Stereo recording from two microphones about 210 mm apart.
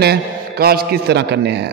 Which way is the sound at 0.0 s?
50° right (ahead or behind).